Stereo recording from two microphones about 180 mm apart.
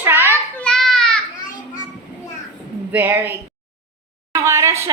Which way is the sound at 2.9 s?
10° right (ahead or behind).